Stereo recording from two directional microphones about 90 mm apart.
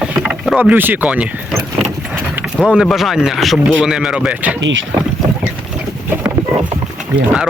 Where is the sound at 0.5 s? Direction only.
20° right (ahead or behind).